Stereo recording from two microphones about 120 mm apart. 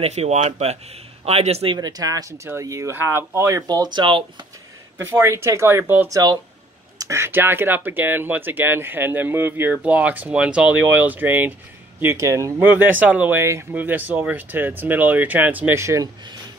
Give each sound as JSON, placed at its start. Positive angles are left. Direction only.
{"t": 0.0, "sound": "speech", "side_deg": -65}
{"t": 1.8, "sound": "speech", "side_deg": -30}
{"t": 3.6, "sound": "speech", "side_deg": -35}
{"t": 4.9, "sound": "speech", "side_deg": -20}
{"t": 6.0, "sound": "speech", "side_deg": -30}